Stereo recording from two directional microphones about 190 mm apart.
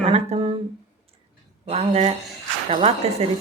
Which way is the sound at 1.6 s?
35° right (ahead or behind).